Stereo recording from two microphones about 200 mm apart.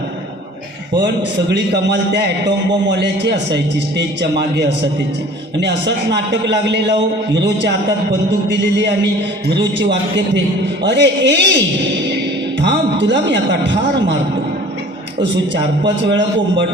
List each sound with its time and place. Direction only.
0.9 s a man's voice: 60° right (ahead or behind)
16.0 s a man's voice: 60° right (ahead or behind)